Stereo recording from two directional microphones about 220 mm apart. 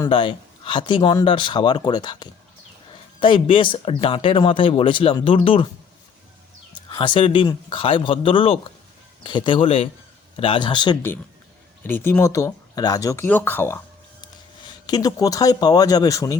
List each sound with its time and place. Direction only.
0.0 s speech: 20° left (ahead or behind)
6.9 s speech: 20° left (ahead or behind)
11.8 s speech: 10° left (ahead or behind)
14.8 s speech: 15° left (ahead or behind)